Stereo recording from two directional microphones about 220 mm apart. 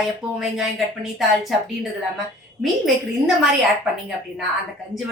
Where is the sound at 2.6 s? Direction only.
Centre (ahead or behind).